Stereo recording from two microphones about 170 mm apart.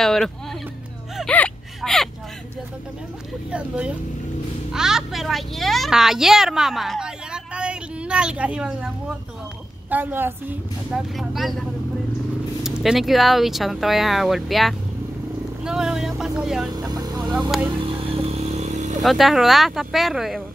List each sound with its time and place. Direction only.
0.0 s a woman's voice: centre (ahead or behind)
1.1 s gasp: 5° left (ahead or behind)
3.5 s a woman's voice: 5° right (ahead or behind)
12.6 s a woman's voice: centre (ahead or behind)
16.7 s speech: 25° right (ahead or behind)
17.2 s speech: 5° right (ahead or behind)
17.8 s a sound: 35° right (ahead or behind)
19.0 s a woman's voice: centre (ahead or behind)